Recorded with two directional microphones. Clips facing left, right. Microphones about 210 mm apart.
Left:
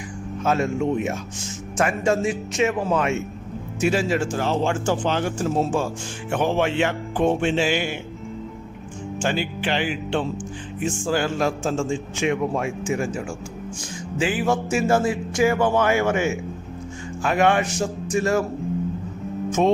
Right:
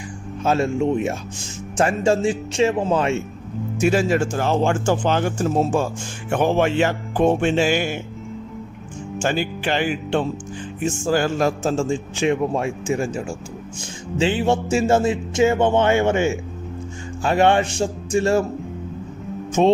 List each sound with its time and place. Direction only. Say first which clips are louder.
0.4 s speech: right 2 dB; 30° right (ahead or behind)
3.8 s speech: right 3 dB; 45° right (ahead or behind)
9.1 s speech: right 2 dB; 45° right (ahead or behind); by 18.4 s 30° right (ahead or behind)
19.5 s music: right 3 dB; 30° right (ahead or behind)